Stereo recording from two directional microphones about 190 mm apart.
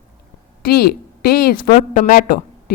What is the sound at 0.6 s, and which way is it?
A woman's voice, 55° left (ahead or behind).